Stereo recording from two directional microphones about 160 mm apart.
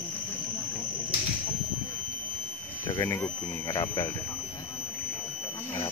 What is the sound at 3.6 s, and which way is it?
Speech, 30° left (ahead or behind).